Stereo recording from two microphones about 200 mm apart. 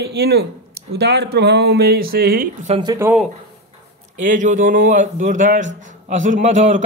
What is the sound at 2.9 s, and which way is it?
Speech, 10° right (ahead or behind).